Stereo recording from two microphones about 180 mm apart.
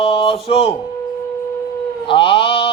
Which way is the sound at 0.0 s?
30° left (ahead or behind).